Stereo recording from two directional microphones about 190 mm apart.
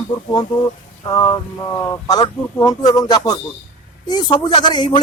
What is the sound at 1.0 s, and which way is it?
A man's voice, 20° left (ahead or behind).